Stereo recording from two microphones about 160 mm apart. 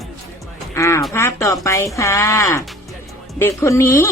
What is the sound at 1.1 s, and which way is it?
Speech, 20° left (ahead or behind).